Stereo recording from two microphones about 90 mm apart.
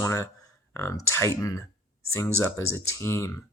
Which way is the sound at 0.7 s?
35° left (ahead or behind).